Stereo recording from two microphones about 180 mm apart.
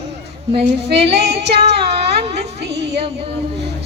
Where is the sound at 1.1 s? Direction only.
65° right (ahead or behind).